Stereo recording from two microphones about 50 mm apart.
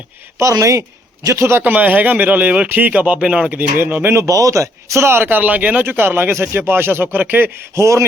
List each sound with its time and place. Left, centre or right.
0.3 s speech: right
1.3 s a man's voice: right
1.6 s speech: right
3.2 s speech: right
3.5 s speech: right
4.1 s speech: right
5.4 s speech: right
7.8 s a sound: right